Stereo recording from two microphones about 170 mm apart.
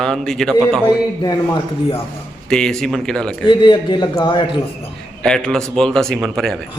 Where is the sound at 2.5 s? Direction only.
5° left (ahead or behind).